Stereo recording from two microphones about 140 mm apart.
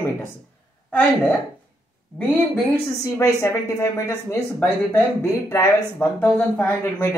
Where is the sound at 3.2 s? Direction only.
15° left (ahead or behind).